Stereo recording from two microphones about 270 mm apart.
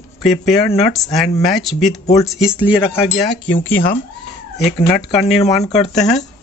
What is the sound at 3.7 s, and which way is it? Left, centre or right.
Speech, left.